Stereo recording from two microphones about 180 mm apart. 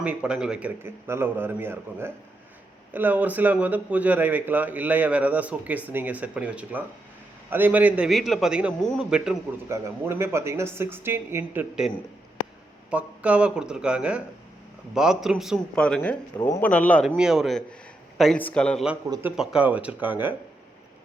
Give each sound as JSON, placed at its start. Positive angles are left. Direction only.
{"t": 0.0, "sound": "a man's voice", "side_deg": -5}
{"t": 9.6, "sound": "speech", "side_deg": -15}
{"t": 12.9, "sound": "a man's voice", "side_deg": -5}
{"t": 17.2, "sound": "a man's voice", "side_deg": -5}
{"t": 19.0, "sound": "speech", "side_deg": -15}
{"t": 19.4, "sound": "speech", "side_deg": -5}